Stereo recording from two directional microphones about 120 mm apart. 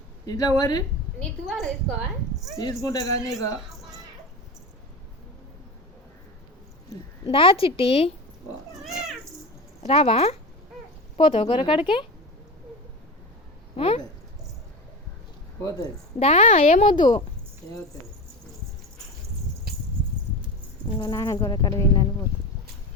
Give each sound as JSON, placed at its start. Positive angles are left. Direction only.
{"t": 0.3, "sound": "speech", "side_deg": 30}
{"t": 1.2, "sound": "a woman's voice", "side_deg": 0}
{"t": 2.6, "sound": "speech", "side_deg": 30}
{"t": 7.3, "sound": "speech", "side_deg": 50}
{"t": 8.8, "sound": "cat", "side_deg": -5}
{"t": 9.8, "sound": "speech", "side_deg": 60}
{"t": 13.7, "sound": "speech", "side_deg": 60}
{"t": 16.1, "sound": "speech", "side_deg": 60}
{"t": 16.9, "sound": "speech", "side_deg": 40}
{"t": 21.0, "sound": "speech", "side_deg": 30}